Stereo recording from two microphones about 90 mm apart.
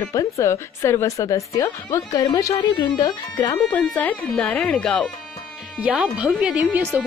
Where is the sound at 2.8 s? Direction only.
40° left (ahead or behind).